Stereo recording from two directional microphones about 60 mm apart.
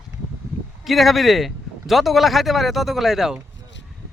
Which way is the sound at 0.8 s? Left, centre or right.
Centre.